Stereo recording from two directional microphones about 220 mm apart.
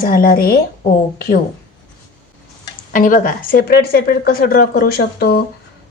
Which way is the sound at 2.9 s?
40° left (ahead or behind).